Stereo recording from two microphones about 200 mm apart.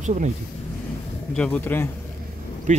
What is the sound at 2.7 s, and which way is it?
Speech, 35° right (ahead or behind).